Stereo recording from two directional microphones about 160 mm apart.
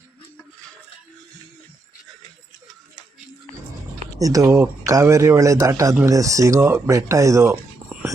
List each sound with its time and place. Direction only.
4.2 s speech: 20° right (ahead or behind)